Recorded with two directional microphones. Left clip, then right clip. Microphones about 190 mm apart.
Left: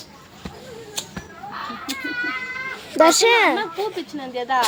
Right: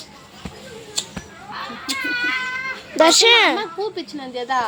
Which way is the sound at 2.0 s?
50° right (ahead or behind).